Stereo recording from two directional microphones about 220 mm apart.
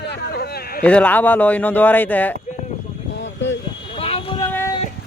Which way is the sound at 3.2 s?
55° left (ahead or behind).